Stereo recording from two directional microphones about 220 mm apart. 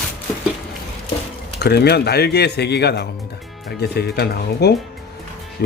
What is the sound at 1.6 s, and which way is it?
Speech, 50° left (ahead or behind).